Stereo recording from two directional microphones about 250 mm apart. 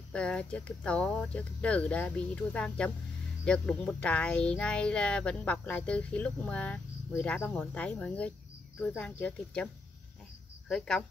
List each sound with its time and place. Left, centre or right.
0.1 s speech: centre
10.7 s speech: centre